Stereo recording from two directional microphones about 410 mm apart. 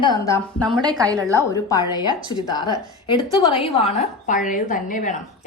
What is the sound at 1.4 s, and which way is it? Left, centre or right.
A woman's voice, centre.